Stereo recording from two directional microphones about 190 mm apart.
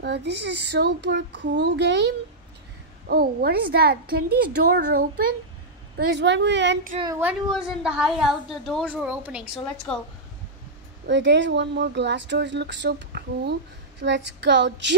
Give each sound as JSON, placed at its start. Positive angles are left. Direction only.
{"t": 0.0, "sound": "a child's voice", "side_deg": -65}
{"t": 7.5, "sound": "a woman's voice", "side_deg": -5}
{"t": 11.1, "sound": "speech", "side_deg": -70}